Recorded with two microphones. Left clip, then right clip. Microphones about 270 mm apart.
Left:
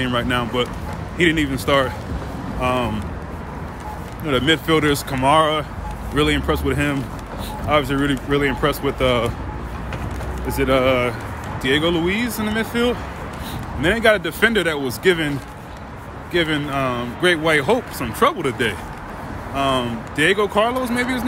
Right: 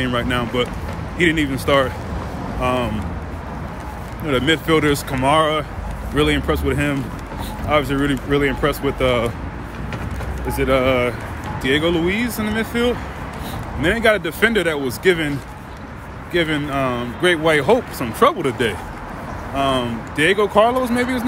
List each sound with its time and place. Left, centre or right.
0.0 s speech: centre
4.3 s speech: centre
10.5 s speech: centre